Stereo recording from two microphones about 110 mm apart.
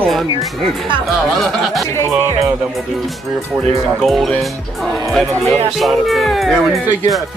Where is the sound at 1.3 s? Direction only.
Centre (ahead or behind).